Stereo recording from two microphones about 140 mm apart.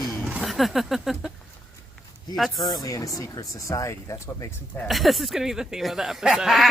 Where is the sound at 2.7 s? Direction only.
25° left (ahead or behind).